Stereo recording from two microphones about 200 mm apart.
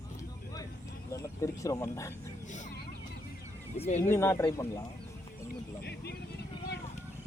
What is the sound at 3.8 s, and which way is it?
Speech, 35° left (ahead or behind).